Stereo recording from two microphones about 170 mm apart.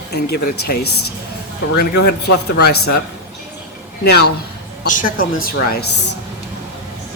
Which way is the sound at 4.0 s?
70° left (ahead or behind).